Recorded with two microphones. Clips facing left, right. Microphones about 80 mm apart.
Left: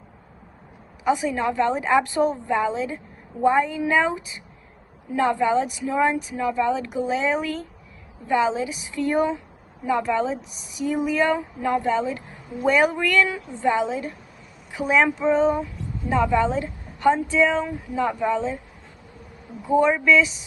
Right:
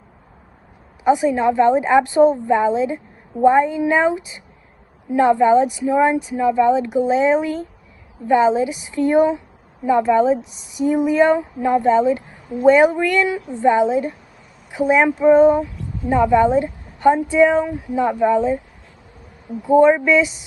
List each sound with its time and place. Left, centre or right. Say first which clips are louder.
1.0 s a woman's voice: right 7 dB; right
19.8 s speech: right 4 dB; centre